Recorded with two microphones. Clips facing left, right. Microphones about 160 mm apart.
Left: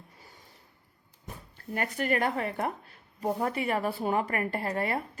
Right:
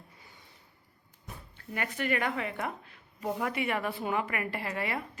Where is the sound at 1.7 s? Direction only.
40° left (ahead or behind).